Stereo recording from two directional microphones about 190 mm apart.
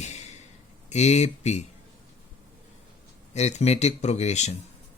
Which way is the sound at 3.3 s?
35° left (ahead or behind).